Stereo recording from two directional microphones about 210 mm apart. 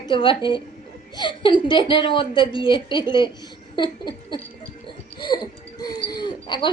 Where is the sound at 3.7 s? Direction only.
20° left (ahead or behind).